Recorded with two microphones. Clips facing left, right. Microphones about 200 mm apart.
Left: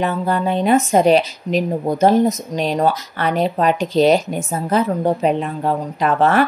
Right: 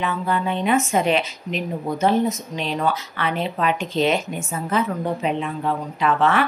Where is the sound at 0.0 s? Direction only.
40° left (ahead or behind).